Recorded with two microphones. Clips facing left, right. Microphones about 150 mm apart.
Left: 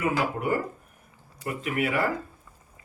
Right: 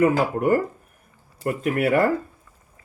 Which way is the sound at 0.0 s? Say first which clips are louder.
Right 7 dB; 45° right (ahead or behind).